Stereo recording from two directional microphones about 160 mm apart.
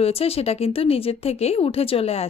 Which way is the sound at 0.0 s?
40° left (ahead or behind).